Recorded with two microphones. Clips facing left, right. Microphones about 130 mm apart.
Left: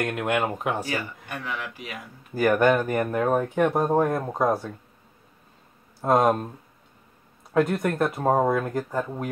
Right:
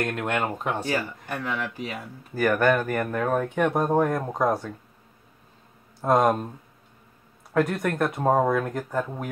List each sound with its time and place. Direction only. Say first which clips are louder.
0.0 s speech: left 1 dB; 10° left (ahead or behind)
0.8 s speech: right 3 dB; 35° right (ahead or behind)
2.3 s speech: left 2 dB; 15° left (ahead or behind)
5.9 s speech: even; 5° left (ahead or behind)
7.5 s speech: left 1 dB; centre (ahead or behind)